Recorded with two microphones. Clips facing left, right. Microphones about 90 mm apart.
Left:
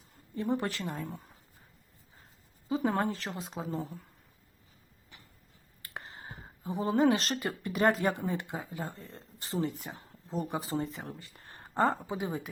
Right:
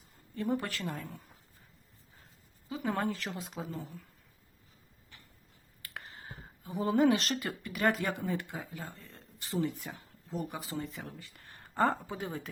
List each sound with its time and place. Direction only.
0.3 s a woman's voice: 25° left (ahead or behind)
2.6 s a woman's voice: 30° left (ahead or behind)
5.8 s speech: 25° left (ahead or behind)